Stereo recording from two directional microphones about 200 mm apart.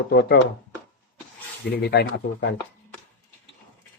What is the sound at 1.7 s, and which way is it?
Speech, 55° left (ahead or behind).